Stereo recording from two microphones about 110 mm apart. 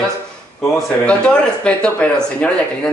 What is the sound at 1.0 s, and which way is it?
Speech, 10° left (ahead or behind).